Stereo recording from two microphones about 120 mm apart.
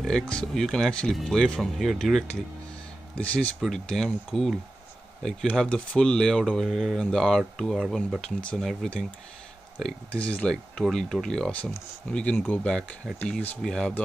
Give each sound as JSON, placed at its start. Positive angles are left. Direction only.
{"t": 0.1, "sound": "speech", "side_deg": 5}
{"t": 3.2, "sound": "speech", "side_deg": 10}
{"t": 8.4, "sound": "speech", "side_deg": 10}